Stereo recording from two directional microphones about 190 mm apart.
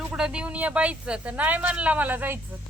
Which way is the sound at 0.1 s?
5° right (ahead or behind).